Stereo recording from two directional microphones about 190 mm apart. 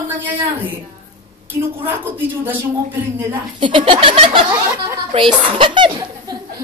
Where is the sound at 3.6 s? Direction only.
25° right (ahead or behind).